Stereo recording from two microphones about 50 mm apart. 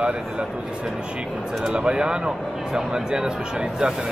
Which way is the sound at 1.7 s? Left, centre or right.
Centre.